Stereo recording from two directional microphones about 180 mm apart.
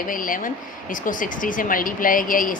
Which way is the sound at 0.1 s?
50° left (ahead or behind).